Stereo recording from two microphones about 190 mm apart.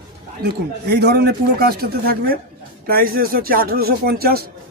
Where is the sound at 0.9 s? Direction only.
60° right (ahead or behind).